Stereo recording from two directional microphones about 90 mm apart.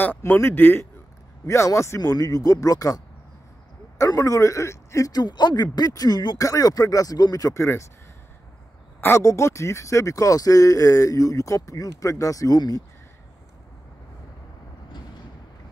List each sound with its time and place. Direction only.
0.3 s speech: 25° left (ahead or behind)
2.0 s speech: 45° left (ahead or behind)
4.0 s speech: 35° left (ahead or behind)
9.0 s speech: 30° left (ahead or behind)